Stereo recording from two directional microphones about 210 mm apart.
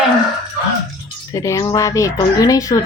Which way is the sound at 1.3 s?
15° left (ahead or behind).